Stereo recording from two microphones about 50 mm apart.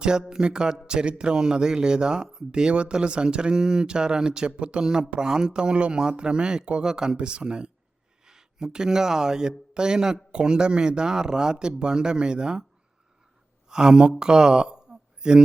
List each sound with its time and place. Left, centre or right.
0.0 s speech: centre
13.7 s speech: centre
14.2 s a sound: centre